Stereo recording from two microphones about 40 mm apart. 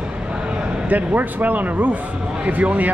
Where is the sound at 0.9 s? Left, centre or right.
Right.